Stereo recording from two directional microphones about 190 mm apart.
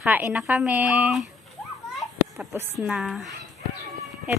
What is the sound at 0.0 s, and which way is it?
Speech, 10° right (ahead or behind).